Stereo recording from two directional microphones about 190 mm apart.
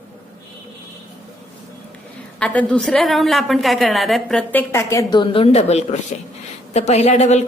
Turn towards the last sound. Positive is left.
turn(degrees=35)  # may be behind; listen again after turning